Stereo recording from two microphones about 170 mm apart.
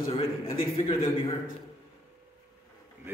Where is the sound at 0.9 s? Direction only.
15° left (ahead or behind).